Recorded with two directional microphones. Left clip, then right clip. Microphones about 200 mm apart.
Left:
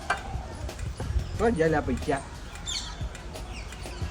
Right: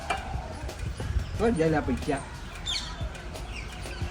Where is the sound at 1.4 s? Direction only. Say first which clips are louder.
Left 1 dB; 5° left (ahead or behind).